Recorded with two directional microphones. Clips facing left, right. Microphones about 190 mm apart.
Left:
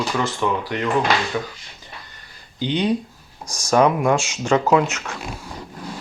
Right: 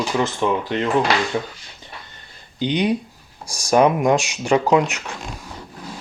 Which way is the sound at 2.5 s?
15° right (ahead or behind).